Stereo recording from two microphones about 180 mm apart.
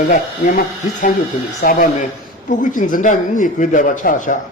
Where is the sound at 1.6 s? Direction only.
50° left (ahead or behind).